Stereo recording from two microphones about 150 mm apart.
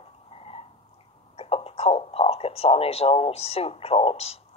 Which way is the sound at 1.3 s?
40° left (ahead or behind).